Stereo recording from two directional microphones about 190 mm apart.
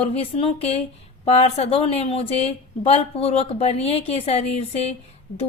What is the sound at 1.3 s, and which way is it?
Speech, 35° left (ahead or behind).